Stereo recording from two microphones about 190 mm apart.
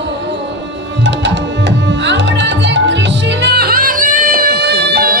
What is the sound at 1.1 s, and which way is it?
Tabla, 70° right (ahead or behind).